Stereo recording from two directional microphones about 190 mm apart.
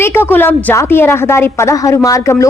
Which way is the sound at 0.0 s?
10° left (ahead or behind).